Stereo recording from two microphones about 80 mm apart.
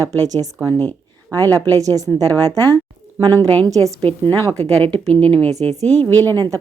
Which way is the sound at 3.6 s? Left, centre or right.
Right.